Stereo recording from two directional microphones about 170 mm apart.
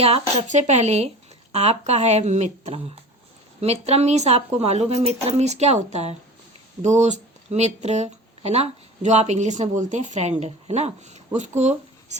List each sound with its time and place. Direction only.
0.0 s speech: 35° right (ahead or behind)